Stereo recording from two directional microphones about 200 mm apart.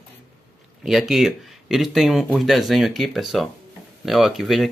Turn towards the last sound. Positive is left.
turn(degrees=0)  # may be behind; listen again after turning